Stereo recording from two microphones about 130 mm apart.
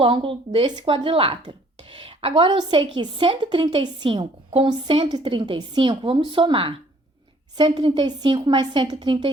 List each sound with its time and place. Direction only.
0.0 s a woman's voice: 45° right (ahead or behind)